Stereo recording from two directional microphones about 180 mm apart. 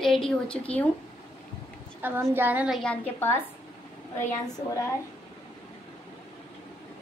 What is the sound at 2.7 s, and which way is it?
Speech, 10° left (ahead or behind).